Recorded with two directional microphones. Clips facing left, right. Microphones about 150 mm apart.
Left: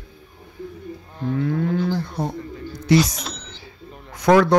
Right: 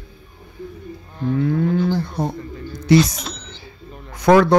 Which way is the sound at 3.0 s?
Centre (ahead or behind).